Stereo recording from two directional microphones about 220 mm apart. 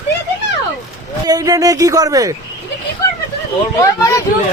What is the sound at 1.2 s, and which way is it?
Speech, 15° right (ahead or behind).